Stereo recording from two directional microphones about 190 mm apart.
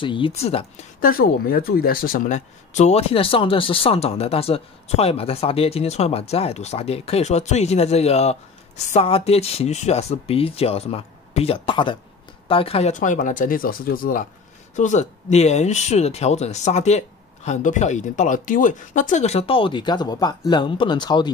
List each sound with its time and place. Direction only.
0.0 s speech: 25° left (ahead or behind)
1.0 s speech: 50° left (ahead or behind); by 21.3 s 25° left (ahead or behind)